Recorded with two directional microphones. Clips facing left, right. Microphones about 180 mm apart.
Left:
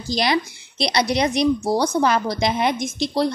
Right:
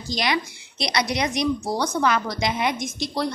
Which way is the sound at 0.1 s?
35° left (ahead or behind).